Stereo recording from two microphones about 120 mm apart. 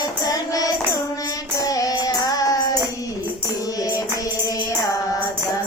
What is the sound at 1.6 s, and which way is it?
Child singing, 30° left (ahead or behind).